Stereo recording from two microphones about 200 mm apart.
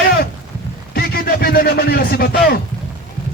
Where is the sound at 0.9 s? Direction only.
50° left (ahead or behind).